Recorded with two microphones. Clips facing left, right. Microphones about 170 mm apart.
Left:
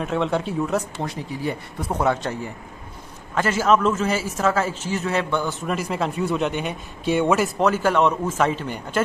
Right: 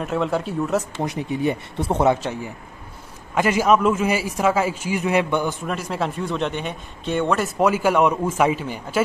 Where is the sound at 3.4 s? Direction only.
15° right (ahead or behind).